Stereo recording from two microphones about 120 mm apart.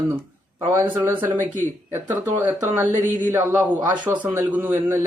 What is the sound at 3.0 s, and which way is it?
Speech, 90° right.